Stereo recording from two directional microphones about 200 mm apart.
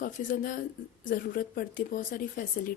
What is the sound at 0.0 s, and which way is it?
Speech, 45° left (ahead or behind).